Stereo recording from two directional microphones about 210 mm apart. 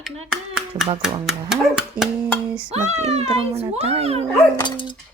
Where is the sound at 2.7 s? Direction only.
30° right (ahead or behind).